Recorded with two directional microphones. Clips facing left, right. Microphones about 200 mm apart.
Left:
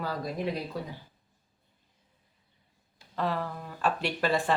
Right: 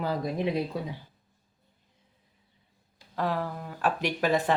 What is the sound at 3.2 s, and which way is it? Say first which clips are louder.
Speech: right 1 dB; 10° right (ahead or behind).